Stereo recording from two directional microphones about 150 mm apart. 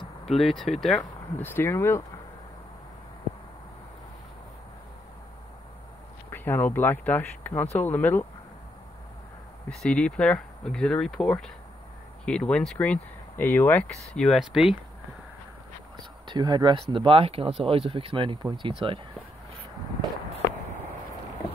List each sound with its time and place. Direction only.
0.3 s speech: centre (ahead or behind)
1.4 s speech: 15° left (ahead or behind)
6.3 s speech: 15° left (ahead or behind)
9.7 s speech: 5° left (ahead or behind)
16.0 s speech: 30° right (ahead or behind)